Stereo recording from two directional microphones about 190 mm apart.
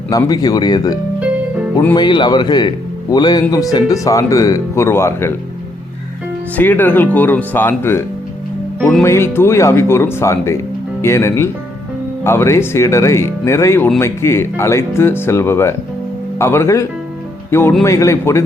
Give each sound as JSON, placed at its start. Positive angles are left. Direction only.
{"t": 0.1, "sound": "speech", "side_deg": 20}
{"t": 2.0, "sound": "speech", "side_deg": 25}
{"t": 6.6, "sound": "speech", "side_deg": 10}